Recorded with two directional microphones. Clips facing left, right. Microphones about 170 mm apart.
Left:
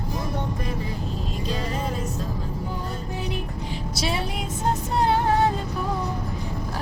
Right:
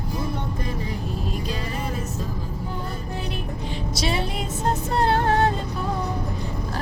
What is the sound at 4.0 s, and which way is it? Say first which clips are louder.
Music: right 1 dB; 5° left (ahead or behind).